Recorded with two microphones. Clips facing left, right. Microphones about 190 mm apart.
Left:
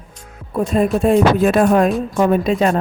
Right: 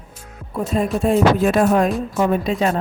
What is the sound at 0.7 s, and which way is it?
Music, 70° left (ahead or behind).